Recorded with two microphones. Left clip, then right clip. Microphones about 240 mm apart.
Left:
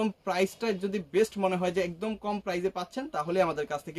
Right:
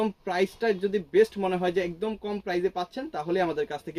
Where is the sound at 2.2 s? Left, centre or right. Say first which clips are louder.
Right 1 dB; left.